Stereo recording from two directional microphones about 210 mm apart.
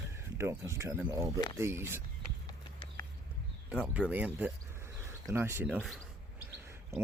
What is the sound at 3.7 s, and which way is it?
Speech, 5° right (ahead or behind).